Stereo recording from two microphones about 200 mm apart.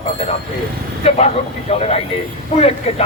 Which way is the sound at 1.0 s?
30° left (ahead or behind).